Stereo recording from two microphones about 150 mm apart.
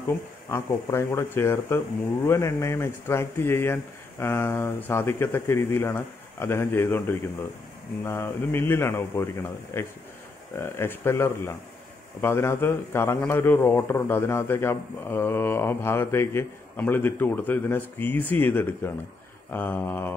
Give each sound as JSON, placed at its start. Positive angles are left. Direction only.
{"t": 0.1, "sound": "a man's voice", "side_deg": 15}